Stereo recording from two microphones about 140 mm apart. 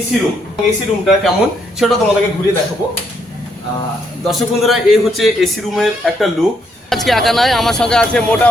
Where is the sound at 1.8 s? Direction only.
Centre (ahead or behind).